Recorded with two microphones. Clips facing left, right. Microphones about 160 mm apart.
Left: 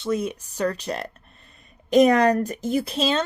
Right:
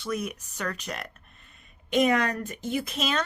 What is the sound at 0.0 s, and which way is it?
Speech, 25° left (ahead or behind).